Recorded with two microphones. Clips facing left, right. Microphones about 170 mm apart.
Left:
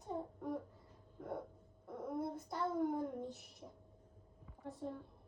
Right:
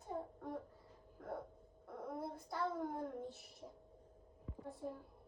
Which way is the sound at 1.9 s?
20° left (ahead or behind).